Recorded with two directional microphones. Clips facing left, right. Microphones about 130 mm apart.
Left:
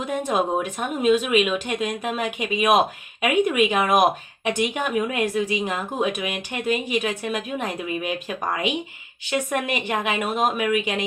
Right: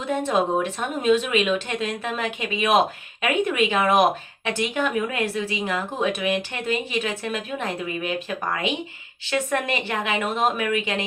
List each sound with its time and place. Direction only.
0.0 s speech: 15° left (ahead or behind)
9.2 s speech: 15° left (ahead or behind)